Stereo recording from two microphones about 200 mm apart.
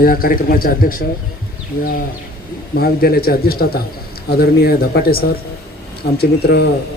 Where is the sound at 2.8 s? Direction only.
50° left (ahead or behind).